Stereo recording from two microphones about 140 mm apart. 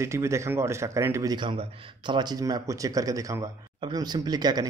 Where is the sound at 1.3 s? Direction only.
35° right (ahead or behind).